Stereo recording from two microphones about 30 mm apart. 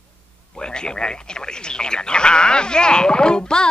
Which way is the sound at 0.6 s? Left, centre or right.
Left.